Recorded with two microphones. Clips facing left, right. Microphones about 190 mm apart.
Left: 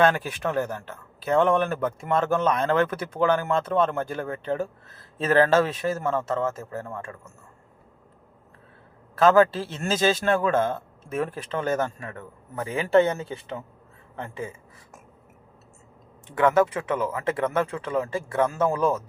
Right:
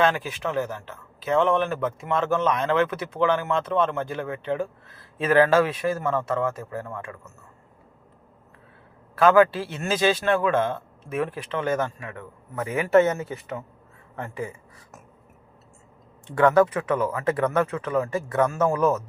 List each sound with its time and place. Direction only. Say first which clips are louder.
0.3 s a man's voice: left 1 dB; 50° left (ahead or behind); by 6.7 s 25° left (ahead or behind)
6.7 s speech: right 1 dB; 40° left (ahead or behind)
9.2 s speech: right 1 dB; 40° left (ahead or behind); by 14.5 s 25° left (ahead or behind)
16.2 s speech: right 2 dB; 20° left (ahead or behind)